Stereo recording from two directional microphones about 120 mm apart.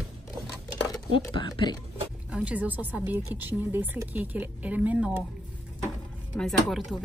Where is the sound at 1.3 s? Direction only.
40° left (ahead or behind).